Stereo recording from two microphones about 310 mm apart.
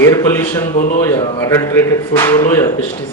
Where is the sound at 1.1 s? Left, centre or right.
Centre.